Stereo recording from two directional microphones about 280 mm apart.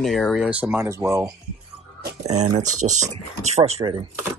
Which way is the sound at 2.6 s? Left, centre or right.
Right.